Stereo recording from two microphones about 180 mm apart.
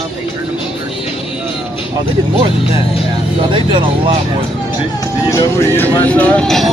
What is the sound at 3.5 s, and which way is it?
Speech, 25° right (ahead or behind).